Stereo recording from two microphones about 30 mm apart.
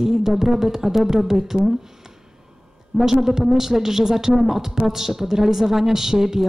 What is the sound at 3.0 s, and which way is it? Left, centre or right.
A woman's voice, centre.